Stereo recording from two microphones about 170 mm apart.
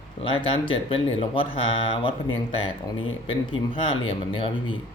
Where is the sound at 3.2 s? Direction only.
30° left (ahead or behind).